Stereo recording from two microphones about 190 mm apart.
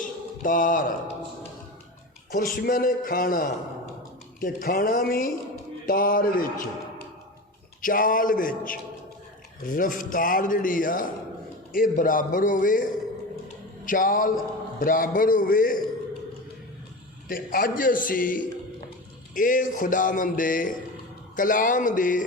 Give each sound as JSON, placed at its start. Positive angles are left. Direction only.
{"t": 0.0, "sound": "mantra", "side_deg": 45}
{"t": 2.3, "sound": "a man's voice", "side_deg": 50}
{"t": 7.8, "sound": "a man's voice", "side_deg": 45}
{"t": 17.2, "sound": "a man's voice", "side_deg": 50}